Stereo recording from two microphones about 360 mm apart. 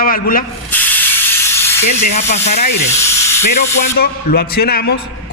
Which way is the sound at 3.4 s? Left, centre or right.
Left.